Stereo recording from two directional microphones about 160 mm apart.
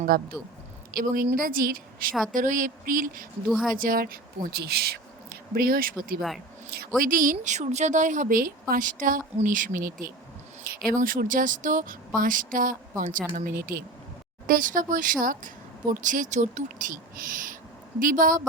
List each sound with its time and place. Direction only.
0.1 s a woman's voice: 70° right (ahead or behind)
3.5 s speech: centre (ahead or behind)
3.8 s a woman's voice: 65° right (ahead or behind)